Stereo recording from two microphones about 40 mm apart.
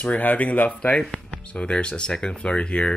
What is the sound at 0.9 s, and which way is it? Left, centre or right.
Speech, centre.